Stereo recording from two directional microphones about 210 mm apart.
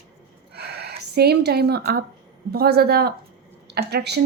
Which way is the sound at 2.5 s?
50° right (ahead or behind).